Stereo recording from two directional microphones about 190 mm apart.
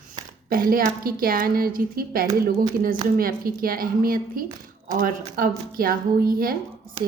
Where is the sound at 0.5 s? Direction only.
50° right (ahead or behind).